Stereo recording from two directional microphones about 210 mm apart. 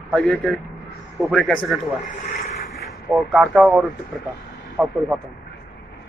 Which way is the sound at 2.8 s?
Centre (ahead or behind).